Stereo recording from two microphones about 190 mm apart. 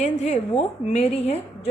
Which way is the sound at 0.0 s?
35° left (ahead or behind).